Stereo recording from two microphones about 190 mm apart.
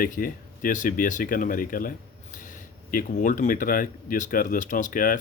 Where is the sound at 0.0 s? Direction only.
45° left (ahead or behind).